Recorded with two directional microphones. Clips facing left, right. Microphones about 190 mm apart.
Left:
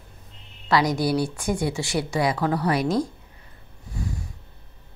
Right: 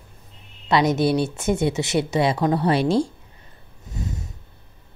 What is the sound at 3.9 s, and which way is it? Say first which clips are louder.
Purr: right 1 dB; 20° right (ahead or behind).